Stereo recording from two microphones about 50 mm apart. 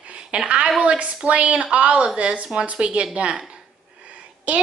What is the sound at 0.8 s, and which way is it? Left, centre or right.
A woman's voice, right.